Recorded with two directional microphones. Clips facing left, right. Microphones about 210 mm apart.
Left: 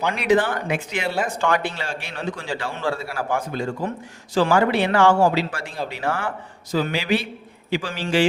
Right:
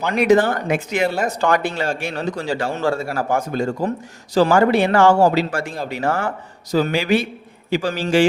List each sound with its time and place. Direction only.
0.1 s a man's voice: 45° right (ahead or behind)